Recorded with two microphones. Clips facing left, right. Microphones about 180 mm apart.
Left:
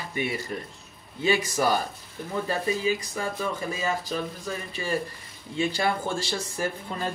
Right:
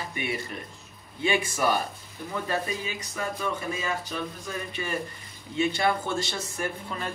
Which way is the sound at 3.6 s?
35° left (ahead or behind).